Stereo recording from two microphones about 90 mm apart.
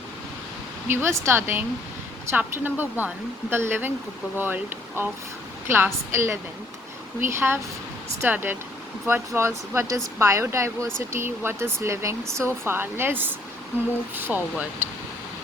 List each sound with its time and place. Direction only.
0.9 s speech: 25° right (ahead or behind)